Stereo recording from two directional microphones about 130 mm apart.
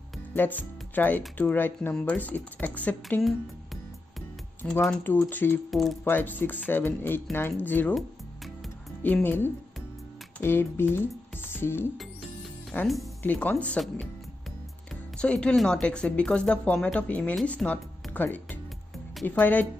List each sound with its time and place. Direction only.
0.3 s speech: 15° left (ahead or behind)
4.6 s speech: 10° left (ahead or behind)
5.7 s speech: centre (ahead or behind)
6.0 s speech: 15° left (ahead or behind)
9.0 s speech: 15° left (ahead or behind)
15.1 s speech: 5° left (ahead or behind)